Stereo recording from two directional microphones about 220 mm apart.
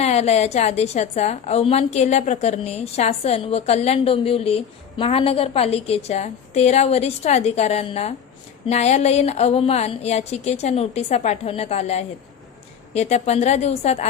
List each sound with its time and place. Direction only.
0.0 s a woman's voice: 30° left (ahead or behind)